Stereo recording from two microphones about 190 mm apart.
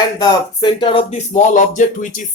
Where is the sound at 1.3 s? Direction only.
40° left (ahead or behind).